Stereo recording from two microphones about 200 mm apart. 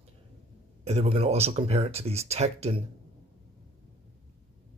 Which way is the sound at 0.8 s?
30° right (ahead or behind).